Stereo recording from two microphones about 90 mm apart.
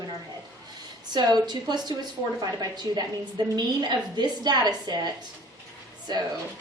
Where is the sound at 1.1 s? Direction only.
50° right (ahead or behind).